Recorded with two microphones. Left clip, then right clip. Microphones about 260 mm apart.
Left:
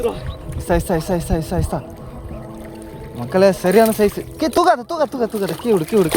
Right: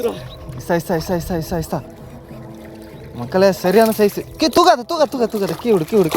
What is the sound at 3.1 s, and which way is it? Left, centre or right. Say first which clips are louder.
Speech: even; centre.